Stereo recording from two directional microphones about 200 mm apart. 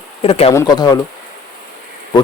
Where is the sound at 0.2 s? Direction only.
30° left (ahead or behind).